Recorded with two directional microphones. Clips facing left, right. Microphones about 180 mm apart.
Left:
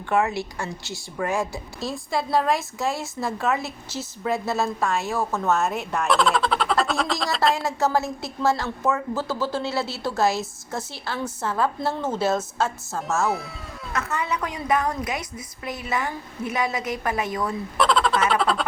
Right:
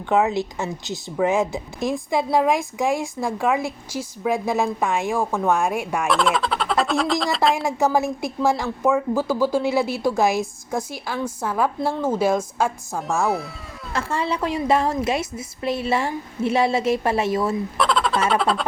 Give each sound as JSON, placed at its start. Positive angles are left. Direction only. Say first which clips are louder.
{"t": 0.1, "sound": "a woman's voice", "louder": "right 3 dB", "side_deg": -20}
{"t": 6.1, "sound": "speech", "louder": "left 1 dB", "side_deg": 0}
{"t": 7.5, "sound": "a woman's voice", "louder": "right 3 dB", "side_deg": -15}
{"t": 13.0, "sound": "speech", "louder": "right 2 dB", "side_deg": 0}
{"t": 13.9, "sound": "a woman's voice", "louder": "right 3 dB", "side_deg": -30}
{"t": 17.7, "sound": "fowl", "louder": "left 3 dB", "side_deg": 0}
{"t": 18.3, "sound": "speech", "louder": "right 2 dB", "side_deg": 0}